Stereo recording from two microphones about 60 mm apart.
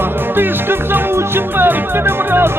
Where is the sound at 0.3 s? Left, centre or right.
Right.